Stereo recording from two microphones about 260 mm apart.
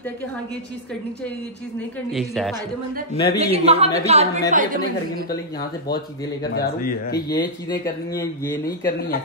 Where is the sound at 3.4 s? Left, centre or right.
Right.